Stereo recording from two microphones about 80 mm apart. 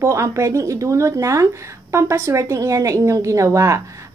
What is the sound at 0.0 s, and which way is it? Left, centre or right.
Speech, right.